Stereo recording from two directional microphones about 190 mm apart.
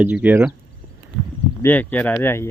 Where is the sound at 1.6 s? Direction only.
10° left (ahead or behind).